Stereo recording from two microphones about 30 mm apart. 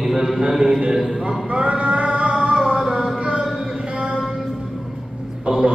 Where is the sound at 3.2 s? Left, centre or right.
Right.